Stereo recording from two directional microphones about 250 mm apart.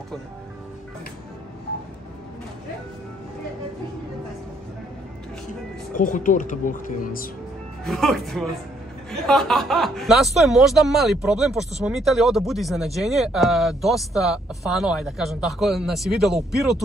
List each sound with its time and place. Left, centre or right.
5.9 s speech: left
7.8 s speech: centre